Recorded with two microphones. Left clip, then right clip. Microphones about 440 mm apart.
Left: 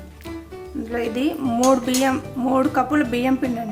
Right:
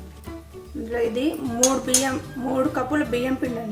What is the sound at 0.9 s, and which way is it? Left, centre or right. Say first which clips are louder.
A woman's voice: even; centre.